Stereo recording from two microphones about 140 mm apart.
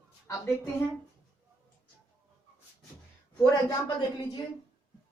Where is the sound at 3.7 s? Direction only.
30° left (ahead or behind).